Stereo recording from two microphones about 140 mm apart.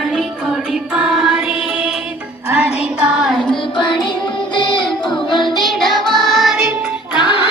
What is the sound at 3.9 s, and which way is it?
Music, 35° left (ahead or behind).